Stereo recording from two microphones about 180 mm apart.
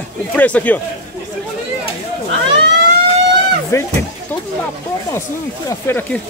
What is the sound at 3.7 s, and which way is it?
Speech, 15° left (ahead or behind).